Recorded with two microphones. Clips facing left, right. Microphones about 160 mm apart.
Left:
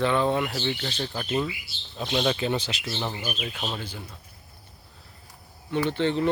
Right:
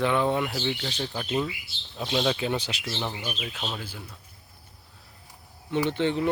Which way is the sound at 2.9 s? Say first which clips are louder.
Left 1 dB; centre (ahead or behind).